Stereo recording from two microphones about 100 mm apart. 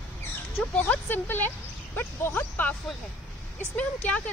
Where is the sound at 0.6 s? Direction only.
15° left (ahead or behind).